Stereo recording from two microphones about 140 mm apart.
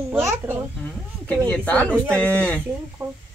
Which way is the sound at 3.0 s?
15° right (ahead or behind).